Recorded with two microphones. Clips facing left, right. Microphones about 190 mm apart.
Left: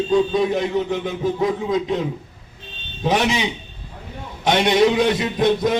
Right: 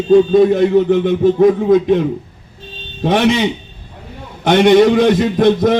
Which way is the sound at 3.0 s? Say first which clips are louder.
Right 6 dB; 60° right (ahead or behind).